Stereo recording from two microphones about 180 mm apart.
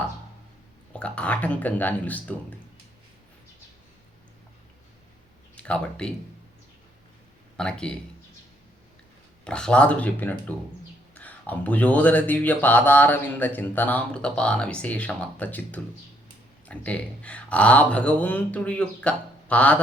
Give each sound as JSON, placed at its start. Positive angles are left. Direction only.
{"t": 0.9, "sound": "speech", "side_deg": 5}
{"t": 5.5, "sound": "speech", "side_deg": 5}
{"t": 7.5, "sound": "speech", "side_deg": 5}
{"t": 9.4, "sound": "speech", "side_deg": 5}